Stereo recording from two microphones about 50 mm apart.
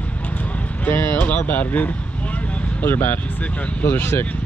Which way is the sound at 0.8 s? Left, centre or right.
Left.